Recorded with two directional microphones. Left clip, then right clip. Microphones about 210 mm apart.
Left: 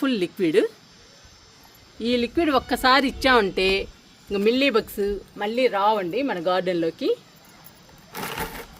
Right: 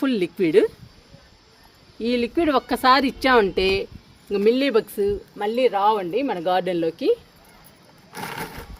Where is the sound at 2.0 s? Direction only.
25° right (ahead or behind).